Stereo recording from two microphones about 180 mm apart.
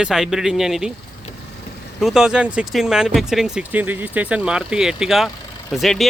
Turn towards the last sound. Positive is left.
turn(degrees=0)  # may be behind; listen again after turning